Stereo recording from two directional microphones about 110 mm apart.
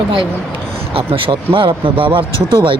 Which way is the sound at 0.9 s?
55° right (ahead or behind).